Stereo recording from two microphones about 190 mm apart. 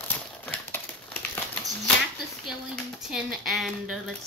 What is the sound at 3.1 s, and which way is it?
Speech, centre (ahead or behind).